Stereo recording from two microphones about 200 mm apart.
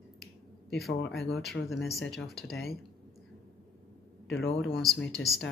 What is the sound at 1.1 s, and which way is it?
Speech, centre (ahead or behind).